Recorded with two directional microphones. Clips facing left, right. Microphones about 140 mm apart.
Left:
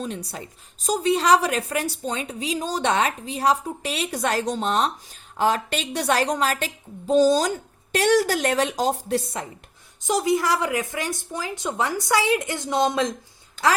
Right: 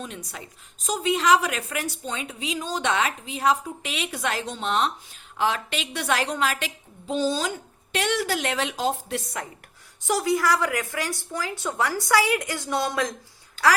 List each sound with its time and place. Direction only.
0.0 s a woman's voice: 35° left (ahead or behind)
10.1 s a woman's voice: 20° left (ahead or behind)